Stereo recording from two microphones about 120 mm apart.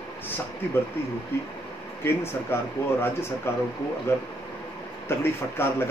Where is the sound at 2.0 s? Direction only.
20° left (ahead or behind).